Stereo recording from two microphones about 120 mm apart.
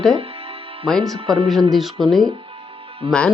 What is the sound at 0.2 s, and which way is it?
Music, 50° right (ahead or behind).